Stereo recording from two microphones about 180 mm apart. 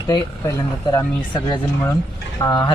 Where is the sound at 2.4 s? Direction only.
20° left (ahead or behind).